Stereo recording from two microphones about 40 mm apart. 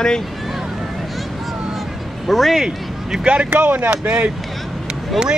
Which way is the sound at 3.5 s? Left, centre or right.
Right.